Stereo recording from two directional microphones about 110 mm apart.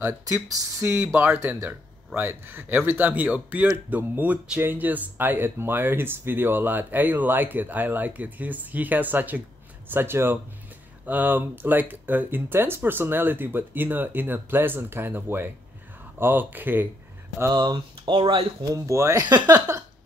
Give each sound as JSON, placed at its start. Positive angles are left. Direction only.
{"t": 0.0, "sound": "speech", "side_deg": -20}
{"t": 17.4, "sound": "speech", "side_deg": -35}
{"t": 18.6, "sound": "speech", "side_deg": -30}
{"t": 19.2, "sound": "speech", "side_deg": -40}